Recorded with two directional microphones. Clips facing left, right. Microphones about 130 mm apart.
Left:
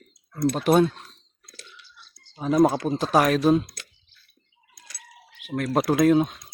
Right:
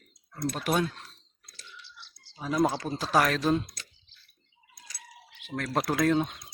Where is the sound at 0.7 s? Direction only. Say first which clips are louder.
Left 9 dB; 30° left (ahead or behind).